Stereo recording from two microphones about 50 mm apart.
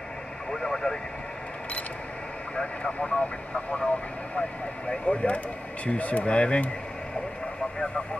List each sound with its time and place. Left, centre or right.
0.5 s vehicle: centre
2.5 s speech: centre